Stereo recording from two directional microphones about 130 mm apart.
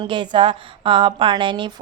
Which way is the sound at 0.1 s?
40° right (ahead or behind).